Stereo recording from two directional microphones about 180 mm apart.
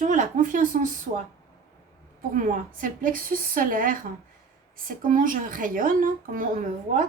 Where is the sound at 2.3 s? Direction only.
50° right (ahead or behind).